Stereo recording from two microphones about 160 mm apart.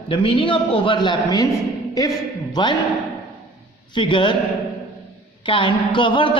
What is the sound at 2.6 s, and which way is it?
Speech, 25° left (ahead or behind).